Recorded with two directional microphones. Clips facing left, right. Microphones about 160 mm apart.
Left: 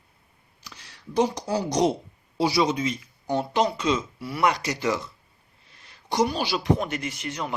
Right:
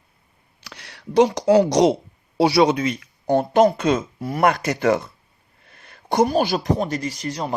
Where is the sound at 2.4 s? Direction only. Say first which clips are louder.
Right 6 dB; 65° right (ahead or behind).